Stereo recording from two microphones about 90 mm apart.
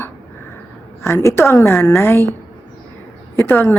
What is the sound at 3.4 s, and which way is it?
Speech, 20° left (ahead or behind).